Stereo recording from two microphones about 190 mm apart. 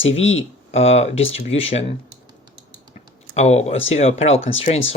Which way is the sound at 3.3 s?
35° left (ahead or behind).